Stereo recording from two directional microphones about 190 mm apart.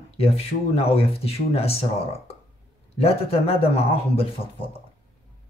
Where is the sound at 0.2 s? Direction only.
30° left (ahead or behind).